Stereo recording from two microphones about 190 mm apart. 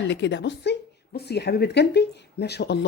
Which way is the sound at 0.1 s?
65° left (ahead or behind).